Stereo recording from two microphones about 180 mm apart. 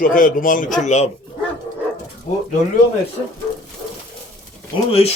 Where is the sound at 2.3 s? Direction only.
50° left (ahead or behind).